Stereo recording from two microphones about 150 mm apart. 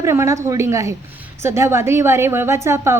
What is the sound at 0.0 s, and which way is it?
A woman's voice, 20° right (ahead or behind).